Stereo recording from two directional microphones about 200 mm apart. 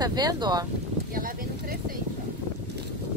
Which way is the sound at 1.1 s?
45° right (ahead or behind).